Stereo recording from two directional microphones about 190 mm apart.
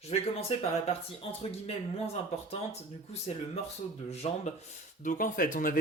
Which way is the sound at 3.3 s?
35° left (ahead or behind).